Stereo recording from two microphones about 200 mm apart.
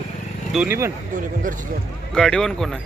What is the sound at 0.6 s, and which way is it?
Speech, 10° right (ahead or behind).